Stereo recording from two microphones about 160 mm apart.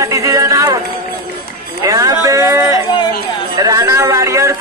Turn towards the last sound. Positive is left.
turn(degrees=-20)  # may be behind; listen again after turning